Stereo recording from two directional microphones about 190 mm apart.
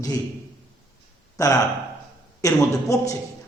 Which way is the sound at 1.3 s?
15° left (ahead or behind).